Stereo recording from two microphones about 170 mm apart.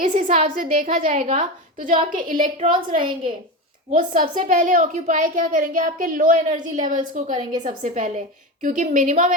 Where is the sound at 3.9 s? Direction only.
50° right (ahead or behind).